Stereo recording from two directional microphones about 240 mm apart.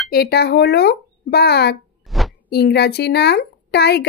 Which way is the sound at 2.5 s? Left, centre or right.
Left.